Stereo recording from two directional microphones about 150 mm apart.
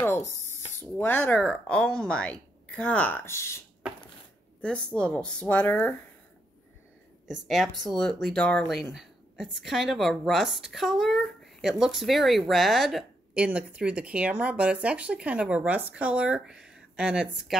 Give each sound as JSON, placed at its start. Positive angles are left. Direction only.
{"t": 0.0, "sound": "speech", "side_deg": 15}
{"t": 4.6, "sound": "speech", "side_deg": 5}
{"t": 7.2, "sound": "a woman's voice", "side_deg": 0}